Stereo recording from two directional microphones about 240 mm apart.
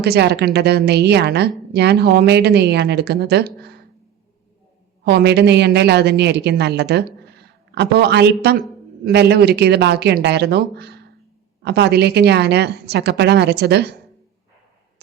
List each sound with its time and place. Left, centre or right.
0.0 s a woman's voice: right
5.0 s a woman's voice: right